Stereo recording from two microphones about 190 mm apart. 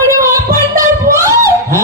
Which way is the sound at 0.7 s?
15° right (ahead or behind).